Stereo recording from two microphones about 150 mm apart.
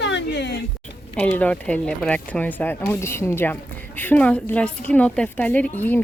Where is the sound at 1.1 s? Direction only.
10° left (ahead or behind).